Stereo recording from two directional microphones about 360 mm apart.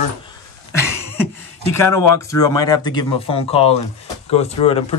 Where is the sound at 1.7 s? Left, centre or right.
Centre.